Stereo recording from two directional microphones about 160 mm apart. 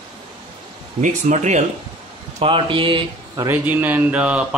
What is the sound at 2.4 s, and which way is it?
A man's voice, 35° right (ahead or behind).